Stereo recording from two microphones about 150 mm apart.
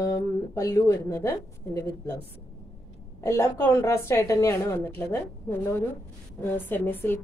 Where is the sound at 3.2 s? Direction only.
15° left (ahead or behind).